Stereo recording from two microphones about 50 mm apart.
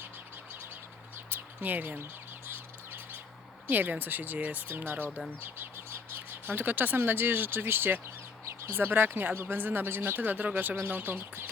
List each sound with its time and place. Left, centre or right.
1.3 s a sound: right
2.5 s bird: right
3.7 s speech: right